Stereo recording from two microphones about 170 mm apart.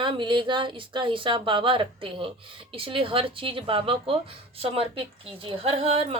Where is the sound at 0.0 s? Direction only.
30° right (ahead or behind).